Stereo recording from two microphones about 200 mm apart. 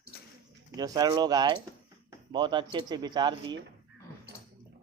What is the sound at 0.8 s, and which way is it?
Speech, 20° right (ahead or behind).